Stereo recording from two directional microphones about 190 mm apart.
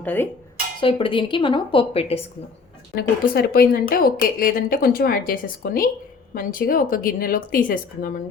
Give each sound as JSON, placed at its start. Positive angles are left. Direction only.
{"t": 0.0, "sound": "speech", "side_deg": 10}
{"t": 0.8, "sound": "speech", "side_deg": 25}
{"t": 2.9, "sound": "a woman's voice", "side_deg": 55}